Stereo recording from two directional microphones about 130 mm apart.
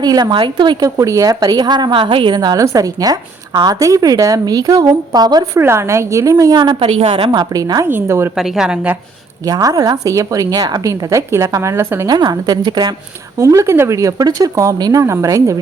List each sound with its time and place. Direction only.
0.0 s a woman's voice: 35° right (ahead or behind)
5.5 s a woman's voice: 20° right (ahead or behind); by 7.4 s 45° right (ahead or behind)
7.5 s a woman's voice: 30° right (ahead or behind)
8.4 s a woman's voice: 5° right (ahead or behind)
9.5 s a woman's voice: 30° right (ahead or behind)
12.0 s a woman's voice: 30° right (ahead or behind)